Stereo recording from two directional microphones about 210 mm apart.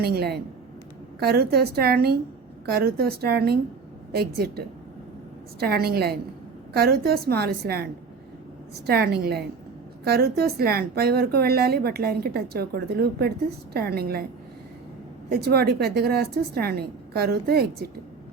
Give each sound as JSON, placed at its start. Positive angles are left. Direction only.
{"t": 0.0, "sound": "a woman's voice", "side_deg": -50}
{"t": 8.9, "sound": "a woman's voice", "side_deg": -50}
{"t": 15.3, "sound": "a woman's voice", "side_deg": -50}